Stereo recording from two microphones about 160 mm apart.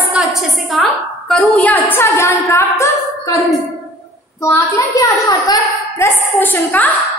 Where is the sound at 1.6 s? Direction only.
10° left (ahead or behind).